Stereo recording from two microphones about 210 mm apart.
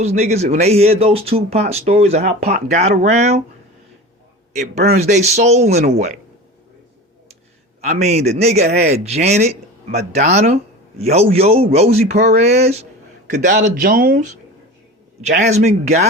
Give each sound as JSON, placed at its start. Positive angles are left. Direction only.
{"t": 0.0, "sound": "a man's voice", "side_deg": -30}
{"t": 4.9, "sound": "a man's voice", "side_deg": -30}
{"t": 7.9, "sound": "a man's voice", "side_deg": -30}
{"t": 15.4, "sound": "a man's voice", "side_deg": -35}